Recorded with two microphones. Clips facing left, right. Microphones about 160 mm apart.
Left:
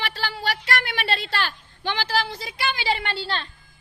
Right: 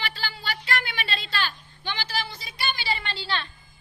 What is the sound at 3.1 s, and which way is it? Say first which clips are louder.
Speech: left 2 dB; 50° left (ahead or behind).